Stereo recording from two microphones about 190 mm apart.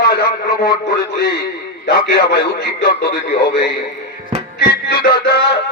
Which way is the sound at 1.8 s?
60° left (ahead or behind).